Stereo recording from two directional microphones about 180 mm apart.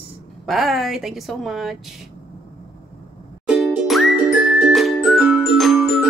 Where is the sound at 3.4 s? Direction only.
5° right (ahead or behind).